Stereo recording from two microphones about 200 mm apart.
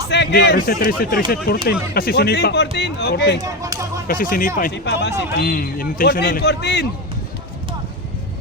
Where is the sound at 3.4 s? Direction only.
15° right (ahead or behind).